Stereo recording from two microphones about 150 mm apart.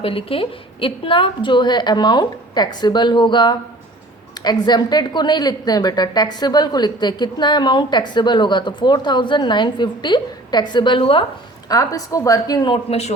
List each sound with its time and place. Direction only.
0.0 s a woman's voice: 35° left (ahead or behind)
11.7 s a woman's voice: 25° left (ahead or behind)
12.7 s speech: 45° left (ahead or behind)